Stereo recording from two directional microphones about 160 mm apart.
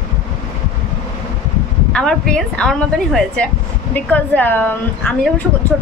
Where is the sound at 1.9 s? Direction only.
5° left (ahead or behind).